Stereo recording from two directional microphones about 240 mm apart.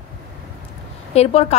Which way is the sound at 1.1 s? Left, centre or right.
Left.